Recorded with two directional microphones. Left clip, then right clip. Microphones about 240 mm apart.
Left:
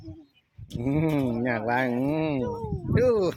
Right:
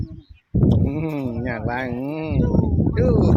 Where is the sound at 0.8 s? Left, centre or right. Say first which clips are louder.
Even; centre.